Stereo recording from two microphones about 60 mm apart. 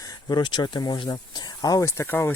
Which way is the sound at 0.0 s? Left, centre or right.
Left.